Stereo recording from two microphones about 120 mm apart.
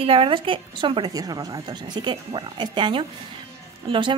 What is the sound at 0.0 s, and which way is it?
A woman's voice, 50° right (ahead or behind).